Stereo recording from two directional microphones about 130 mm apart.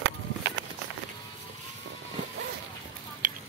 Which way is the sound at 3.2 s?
90° right.